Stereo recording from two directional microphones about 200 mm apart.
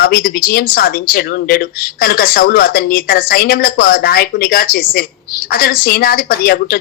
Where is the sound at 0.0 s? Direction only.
50° left (ahead or behind).